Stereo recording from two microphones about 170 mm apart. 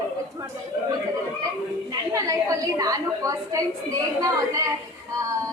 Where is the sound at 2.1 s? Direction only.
20° right (ahead or behind).